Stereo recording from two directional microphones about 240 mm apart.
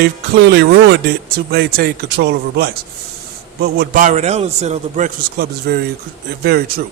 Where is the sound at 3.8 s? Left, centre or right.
Right.